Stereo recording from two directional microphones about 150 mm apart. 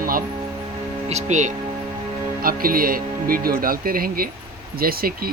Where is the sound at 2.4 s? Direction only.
75° right (ahead or behind).